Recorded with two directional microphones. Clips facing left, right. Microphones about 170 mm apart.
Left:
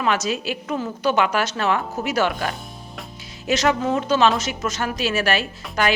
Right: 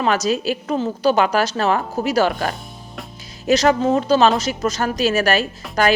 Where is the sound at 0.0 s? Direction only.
35° right (ahead or behind).